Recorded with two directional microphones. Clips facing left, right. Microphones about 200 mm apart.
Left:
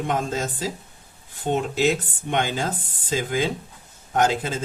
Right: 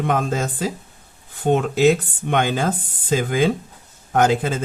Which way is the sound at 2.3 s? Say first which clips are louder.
Right 4 dB; 60° right (ahead or behind).